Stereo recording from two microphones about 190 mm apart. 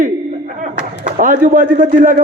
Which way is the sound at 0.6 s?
45° right (ahead or behind).